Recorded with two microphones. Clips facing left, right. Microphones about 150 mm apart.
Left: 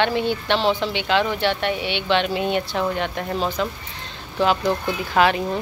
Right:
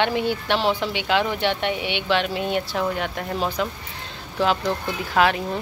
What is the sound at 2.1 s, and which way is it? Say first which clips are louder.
Speech: left 2 dB; centre (ahead or behind).